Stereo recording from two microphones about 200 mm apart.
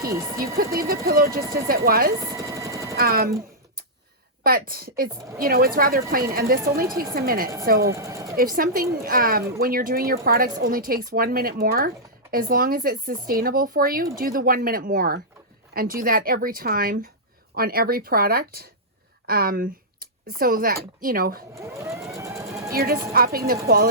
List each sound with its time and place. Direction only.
0.1 s speech: 15° right (ahead or behind)
0.5 s speech: 50° right (ahead or behind)
2.2 s vehicle: 15° right (ahead or behind)
2.9 s speech: 50° right (ahead or behind)
4.4 s speech: 45° right (ahead or behind)
7.9 s sewing machine: 15° right (ahead or behind)
8.4 s speech: 45° right (ahead or behind)
21.5 s speech: 15° right (ahead or behind)
22.1 s a sound: 15° right (ahead or behind)
22.7 s speech: 50° right (ahead or behind)